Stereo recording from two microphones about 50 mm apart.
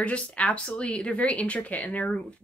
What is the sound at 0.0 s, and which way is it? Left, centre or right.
A woman's voice, left.